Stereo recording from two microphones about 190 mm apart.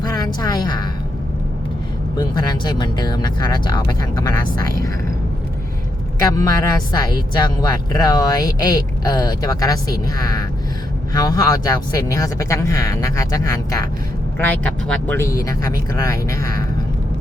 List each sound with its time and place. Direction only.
0.0 s a sound: 20° left (ahead or behind)
2.1 s a woman's voice: 20° left (ahead or behind)
6.2 s a woman's voice: 15° left (ahead or behind)